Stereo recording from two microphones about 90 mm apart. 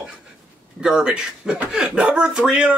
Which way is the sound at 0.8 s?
10° right (ahead or behind).